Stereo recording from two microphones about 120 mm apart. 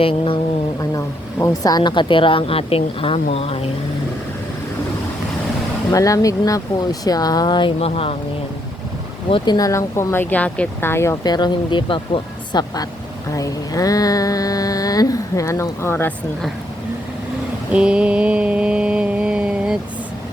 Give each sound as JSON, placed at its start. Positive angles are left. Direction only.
{"t": 0.0, "sound": "speech", "side_deg": 50}
{"t": 0.8, "sound": "speech", "side_deg": 30}
{"t": 5.9, "sound": "speech", "side_deg": 30}
{"t": 7.8, "sound": "speech", "side_deg": 55}
{"t": 9.3, "sound": "a sound", "side_deg": 35}
{"t": 11.3, "sound": "speech", "side_deg": 35}
{"t": 13.3, "sound": "a sound", "side_deg": 30}
{"t": 17.7, "sound": "mantra", "side_deg": -10}